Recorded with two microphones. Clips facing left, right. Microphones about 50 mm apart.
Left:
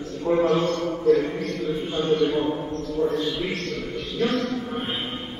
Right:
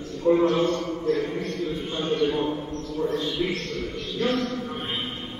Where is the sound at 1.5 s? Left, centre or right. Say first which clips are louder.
Left 2 dB; left.